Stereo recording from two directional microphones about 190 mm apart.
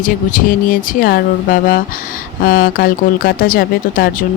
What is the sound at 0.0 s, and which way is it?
Speech, 45° left (ahead or behind).